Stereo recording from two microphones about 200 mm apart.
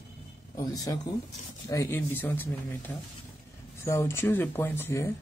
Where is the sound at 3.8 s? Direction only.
15° left (ahead or behind).